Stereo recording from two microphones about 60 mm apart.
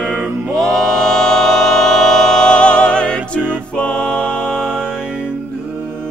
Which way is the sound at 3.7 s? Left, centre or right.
Centre.